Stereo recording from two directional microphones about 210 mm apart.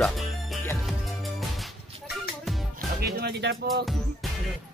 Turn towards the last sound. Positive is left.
turn(degrees=-50)  # may be behind; listen again after turning